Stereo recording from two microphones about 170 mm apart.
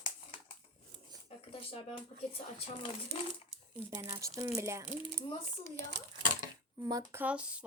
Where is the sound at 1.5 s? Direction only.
35° left (ahead or behind).